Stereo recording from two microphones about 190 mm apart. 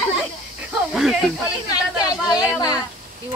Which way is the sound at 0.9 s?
Centre (ahead or behind).